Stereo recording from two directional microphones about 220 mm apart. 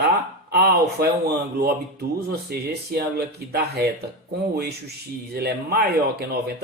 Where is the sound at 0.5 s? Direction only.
45° right (ahead or behind).